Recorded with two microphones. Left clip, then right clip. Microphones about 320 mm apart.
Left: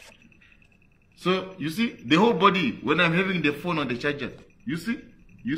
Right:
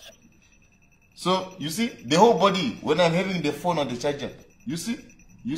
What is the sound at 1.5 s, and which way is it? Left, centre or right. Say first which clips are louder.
A man's voice: even; right.